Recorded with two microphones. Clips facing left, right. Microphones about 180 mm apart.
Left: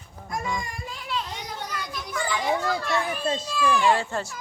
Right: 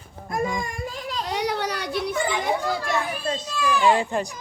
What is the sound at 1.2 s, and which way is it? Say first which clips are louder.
Children playing: right 10 dB; 70° right (ahead or behind).